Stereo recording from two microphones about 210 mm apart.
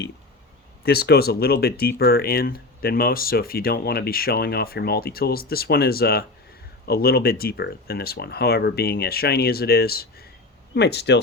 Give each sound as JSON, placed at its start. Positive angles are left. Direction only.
{"t": 0.9, "sound": "speech", "side_deg": 50}